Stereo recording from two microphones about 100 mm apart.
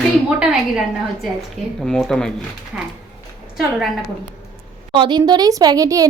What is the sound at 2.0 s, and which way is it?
Speech, 5° left (ahead or behind).